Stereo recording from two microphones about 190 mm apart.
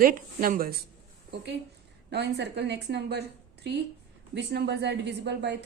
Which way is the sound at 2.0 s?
65° right (ahead or behind).